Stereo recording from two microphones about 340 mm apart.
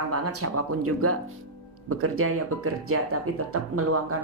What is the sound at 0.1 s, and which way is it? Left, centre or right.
Speech, right.